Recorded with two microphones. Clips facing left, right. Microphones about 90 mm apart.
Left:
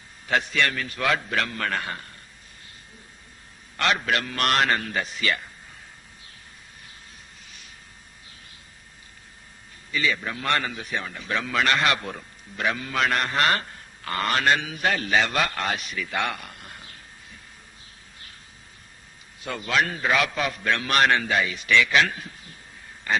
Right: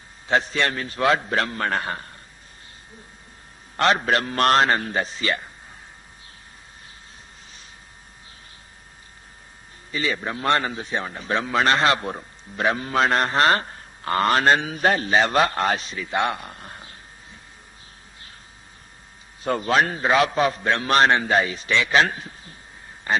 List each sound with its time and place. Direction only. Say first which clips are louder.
0.3 s a man's voice: right 2 dB; 30° right (ahead or behind)
3.8 s a man's voice: right 4 dB; 35° right (ahead or behind)
9.9 s a man's voice: right 1 dB; 35° right (ahead or behind)
19.4 s a man's voice: right 5 dB; 35° right (ahead or behind)